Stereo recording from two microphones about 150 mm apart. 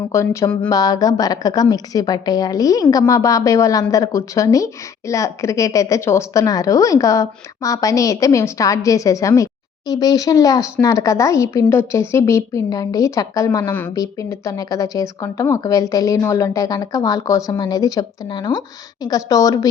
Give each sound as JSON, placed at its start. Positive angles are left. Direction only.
{"t": 0.1, "sound": "speech", "side_deg": 20}